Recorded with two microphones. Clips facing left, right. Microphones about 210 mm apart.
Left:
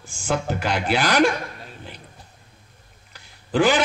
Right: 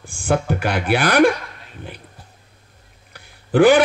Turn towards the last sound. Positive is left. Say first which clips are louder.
# right 7 dB
turn(degrees=-60)  # may be behind; listen again after turning